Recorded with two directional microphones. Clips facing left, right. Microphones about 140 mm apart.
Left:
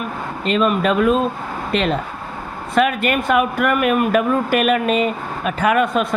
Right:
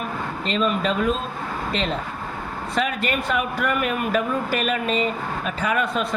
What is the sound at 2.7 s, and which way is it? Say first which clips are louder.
Speech: left 7 dB; 60° left (ahead or behind).